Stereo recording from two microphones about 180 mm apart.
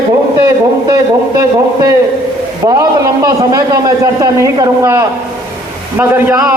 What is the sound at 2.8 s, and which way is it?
A man's voice, 20° right (ahead or behind).